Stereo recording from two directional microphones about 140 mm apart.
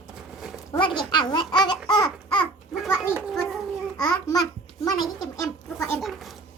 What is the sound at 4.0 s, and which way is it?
Babbling, 25° left (ahead or behind).